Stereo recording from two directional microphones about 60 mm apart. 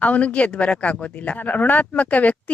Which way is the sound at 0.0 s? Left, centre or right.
Left.